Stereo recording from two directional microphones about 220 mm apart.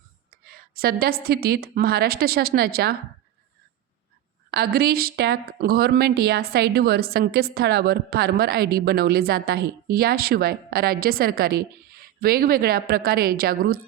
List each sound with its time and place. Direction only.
0.3 s speech: 45° right (ahead or behind)
4.5 s speech: 45° right (ahead or behind)